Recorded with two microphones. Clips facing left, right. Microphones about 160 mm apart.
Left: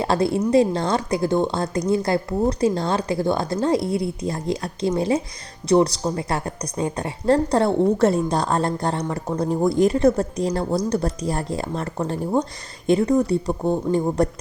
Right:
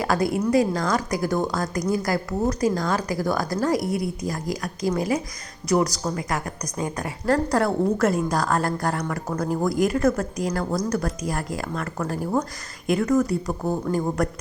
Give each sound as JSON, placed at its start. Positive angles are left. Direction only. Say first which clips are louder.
{"t": 0.0, "sound": "speech", "louder": "left 2 dB", "side_deg": 25}